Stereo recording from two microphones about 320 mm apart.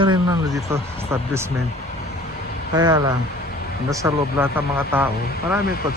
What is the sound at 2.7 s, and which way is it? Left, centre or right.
Speech, centre.